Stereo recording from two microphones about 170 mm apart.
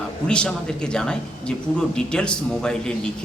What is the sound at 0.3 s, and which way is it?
A man's voice, 5° left (ahead or behind).